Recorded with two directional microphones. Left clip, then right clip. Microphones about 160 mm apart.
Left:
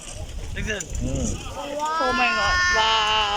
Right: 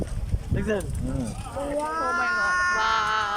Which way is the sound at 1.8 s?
Centre (ahead or behind).